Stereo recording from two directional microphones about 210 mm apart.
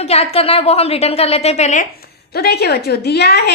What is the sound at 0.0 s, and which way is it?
A woman's voice, 30° left (ahead or behind).